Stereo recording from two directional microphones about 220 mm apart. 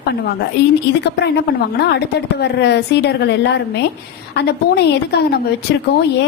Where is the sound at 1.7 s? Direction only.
50° left (ahead or behind).